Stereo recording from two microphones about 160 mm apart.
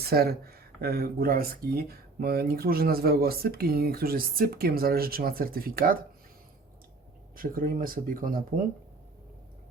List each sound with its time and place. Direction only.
0.0 s speech: 75° right (ahead or behind)
7.3 s speech: 60° right (ahead or behind)